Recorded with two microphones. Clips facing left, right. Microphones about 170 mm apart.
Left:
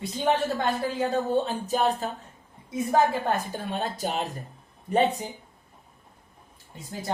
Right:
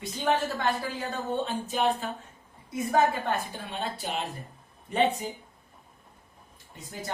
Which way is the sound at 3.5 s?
40° left (ahead or behind).